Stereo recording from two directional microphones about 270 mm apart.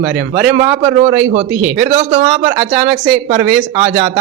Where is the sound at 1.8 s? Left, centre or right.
Right.